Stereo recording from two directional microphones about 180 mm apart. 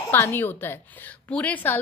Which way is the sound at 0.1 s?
10° left (ahead or behind).